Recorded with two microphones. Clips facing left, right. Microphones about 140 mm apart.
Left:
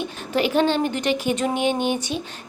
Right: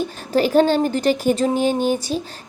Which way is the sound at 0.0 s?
40° right (ahead or behind).